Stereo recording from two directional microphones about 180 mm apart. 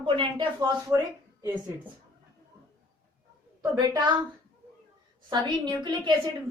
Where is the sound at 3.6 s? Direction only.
20° right (ahead or behind).